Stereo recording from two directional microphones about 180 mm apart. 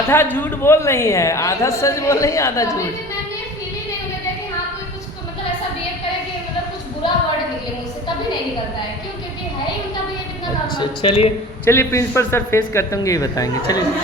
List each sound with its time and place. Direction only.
0.1 s a man's voice: 10° left (ahead or behind)
10.8 s a woman's voice: 30° left (ahead or behind)
11.6 s a man's voice: 15° left (ahead or behind)